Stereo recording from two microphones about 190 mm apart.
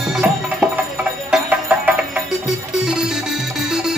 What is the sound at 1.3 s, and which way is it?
Music, 5° right (ahead or behind).